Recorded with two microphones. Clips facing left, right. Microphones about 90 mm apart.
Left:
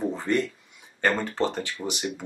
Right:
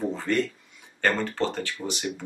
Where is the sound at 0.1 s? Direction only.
20° left (ahead or behind).